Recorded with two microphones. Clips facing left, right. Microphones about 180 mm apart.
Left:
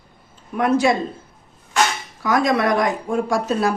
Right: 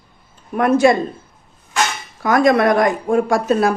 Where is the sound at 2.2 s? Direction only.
55° right (ahead or behind).